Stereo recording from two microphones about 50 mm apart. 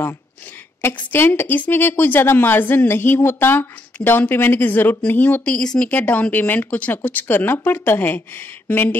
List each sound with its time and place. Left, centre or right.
1.1 s a woman's voice: left
5.4 s a woman's voice: left